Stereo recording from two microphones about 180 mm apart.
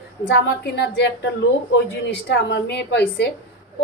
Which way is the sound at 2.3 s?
65° left (ahead or behind).